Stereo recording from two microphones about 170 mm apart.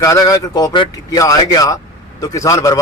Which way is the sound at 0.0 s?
20° left (ahead or behind).